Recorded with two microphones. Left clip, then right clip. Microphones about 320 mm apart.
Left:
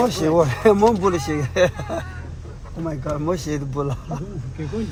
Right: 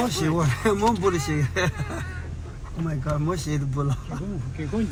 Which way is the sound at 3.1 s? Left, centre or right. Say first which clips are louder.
Left 4 dB; left.